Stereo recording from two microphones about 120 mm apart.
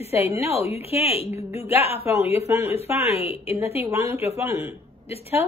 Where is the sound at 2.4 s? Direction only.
25° right (ahead or behind).